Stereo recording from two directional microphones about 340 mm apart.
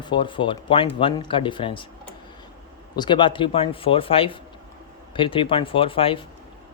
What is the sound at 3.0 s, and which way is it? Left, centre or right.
Speech, centre.